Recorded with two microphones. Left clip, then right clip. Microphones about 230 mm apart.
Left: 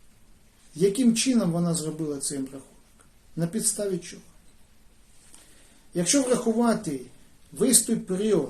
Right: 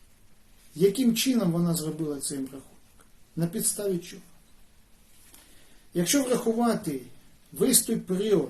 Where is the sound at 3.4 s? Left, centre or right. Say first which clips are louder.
Left 2 dB; centre.